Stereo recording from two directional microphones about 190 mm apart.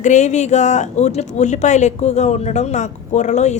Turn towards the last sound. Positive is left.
turn(degrees=35)  # may be behind; listen again after turning